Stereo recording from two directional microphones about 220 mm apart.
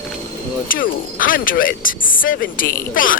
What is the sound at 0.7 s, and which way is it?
Speech, 40° left (ahead or behind).